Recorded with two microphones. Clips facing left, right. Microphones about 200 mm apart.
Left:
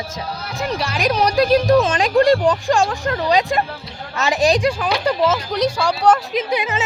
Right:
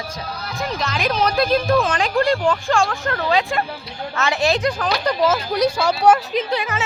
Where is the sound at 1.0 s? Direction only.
15° left (ahead or behind); by 5.7 s 5° right (ahead or behind).